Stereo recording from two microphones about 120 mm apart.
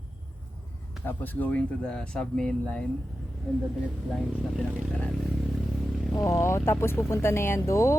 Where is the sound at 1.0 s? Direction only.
15° left (ahead or behind).